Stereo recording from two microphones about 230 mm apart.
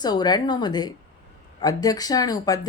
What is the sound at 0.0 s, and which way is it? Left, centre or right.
Speech, centre.